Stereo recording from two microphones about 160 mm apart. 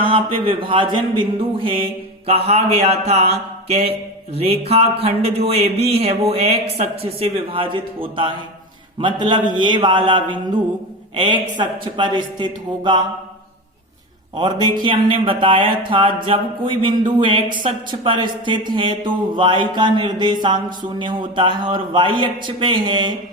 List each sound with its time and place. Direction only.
0.0 s a man's voice: 35° right (ahead or behind)
14.3 s speech: 30° right (ahead or behind)